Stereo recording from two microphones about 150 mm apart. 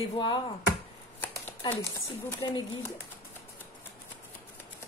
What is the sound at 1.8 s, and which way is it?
Speech, 25° left (ahead or behind).